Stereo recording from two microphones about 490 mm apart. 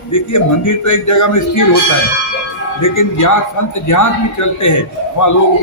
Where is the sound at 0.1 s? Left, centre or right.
Left.